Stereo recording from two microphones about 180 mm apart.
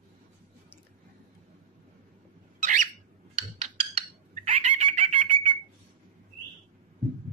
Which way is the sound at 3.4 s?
35° right (ahead or behind).